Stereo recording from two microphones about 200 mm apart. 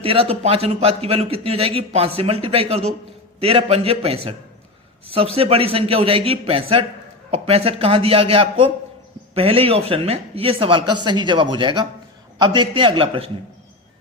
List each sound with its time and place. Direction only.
0.0 s a man's voice: 30° right (ahead or behind)
5.4 s a man's voice: 30° right (ahead or behind)